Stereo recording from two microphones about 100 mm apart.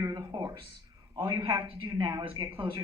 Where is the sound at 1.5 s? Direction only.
20° right (ahead or behind).